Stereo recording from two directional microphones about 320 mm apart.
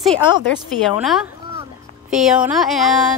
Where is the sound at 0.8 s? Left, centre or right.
Centre.